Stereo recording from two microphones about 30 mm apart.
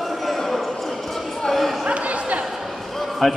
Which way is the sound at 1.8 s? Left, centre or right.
Right.